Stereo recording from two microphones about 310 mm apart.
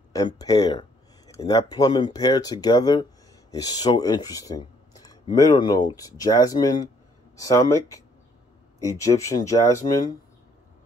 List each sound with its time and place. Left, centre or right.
0.1 s speech: centre